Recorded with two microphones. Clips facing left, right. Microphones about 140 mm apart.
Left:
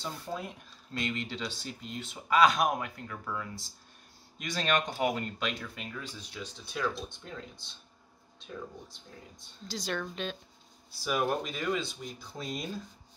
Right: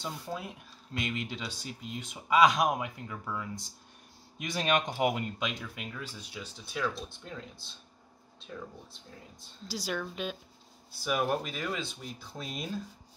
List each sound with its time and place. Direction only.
0.0 s speech: 5° right (ahead or behind)
9.7 s speech: 10° right (ahead or behind)